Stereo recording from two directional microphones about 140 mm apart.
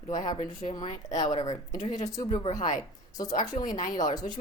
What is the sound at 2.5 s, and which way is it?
Speech, 60° left (ahead or behind).